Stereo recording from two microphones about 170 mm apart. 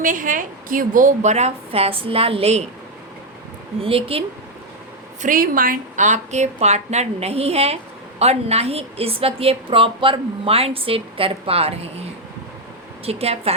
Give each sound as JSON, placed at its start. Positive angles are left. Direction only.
{"t": 0.0, "sound": "a woman's voice", "side_deg": -55}
{"t": 3.8, "sound": "a woman's voice", "side_deg": -35}
{"t": 5.2, "sound": "a woman's voice", "side_deg": -55}
{"t": 13.1, "sound": "a woman's voice", "side_deg": -35}